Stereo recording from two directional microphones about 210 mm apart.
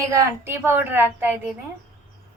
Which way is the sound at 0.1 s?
15° right (ahead or behind).